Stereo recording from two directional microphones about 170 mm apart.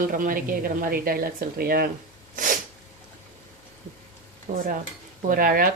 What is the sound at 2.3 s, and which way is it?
Sneeze, 50° right (ahead or behind).